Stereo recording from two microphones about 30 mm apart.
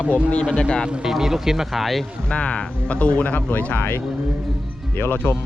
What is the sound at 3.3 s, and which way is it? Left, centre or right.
Speech, left.